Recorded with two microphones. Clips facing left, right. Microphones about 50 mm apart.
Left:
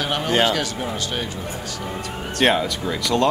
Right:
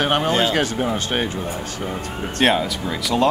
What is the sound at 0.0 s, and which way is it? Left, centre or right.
Speech, right.